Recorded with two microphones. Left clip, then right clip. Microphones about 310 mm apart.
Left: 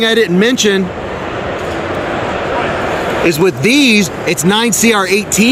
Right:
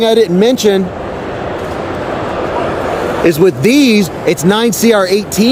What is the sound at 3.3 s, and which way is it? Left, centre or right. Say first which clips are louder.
Speech: right 3 dB; centre.